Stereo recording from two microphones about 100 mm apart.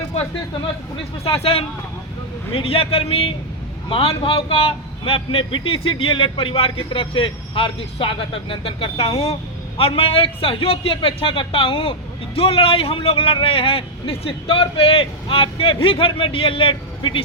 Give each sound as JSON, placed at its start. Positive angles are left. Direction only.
{"t": 1.2, "sound": "a man's voice", "side_deg": 80}